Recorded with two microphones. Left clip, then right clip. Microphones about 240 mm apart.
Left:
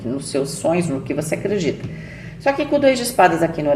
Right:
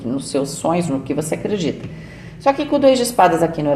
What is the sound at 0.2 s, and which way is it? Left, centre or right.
Speech, right.